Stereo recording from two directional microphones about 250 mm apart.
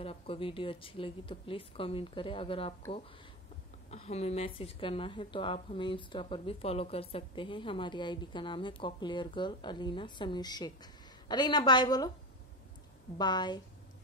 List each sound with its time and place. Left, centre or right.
0.0 s a woman's voice: left
3.9 s a woman's voice: left
13.2 s a woman's voice: centre